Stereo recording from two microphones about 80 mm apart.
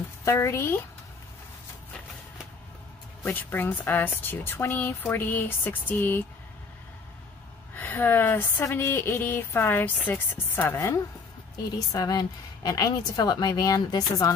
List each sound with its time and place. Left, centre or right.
0.2 s speech: left
3.3 s speech: left
7.7 s a woman's voice: left
11.9 s a woman's voice: left